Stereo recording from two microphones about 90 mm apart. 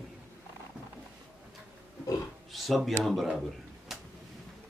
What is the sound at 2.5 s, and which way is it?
Speech, centre (ahead or behind).